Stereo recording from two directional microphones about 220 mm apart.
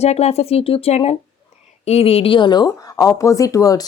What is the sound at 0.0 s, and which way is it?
A woman's voice, 30° left (ahead or behind).